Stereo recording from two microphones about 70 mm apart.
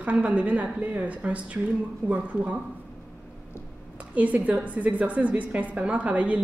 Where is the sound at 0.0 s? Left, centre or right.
Centre.